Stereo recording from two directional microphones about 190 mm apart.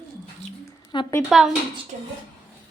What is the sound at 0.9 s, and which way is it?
Speech, 25° left (ahead or behind).